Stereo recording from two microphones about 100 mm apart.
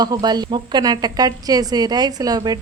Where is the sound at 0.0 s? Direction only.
45° right (ahead or behind).